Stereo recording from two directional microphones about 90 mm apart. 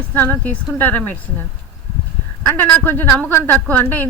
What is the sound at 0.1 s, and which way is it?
A woman's voice, 20° left (ahead or behind).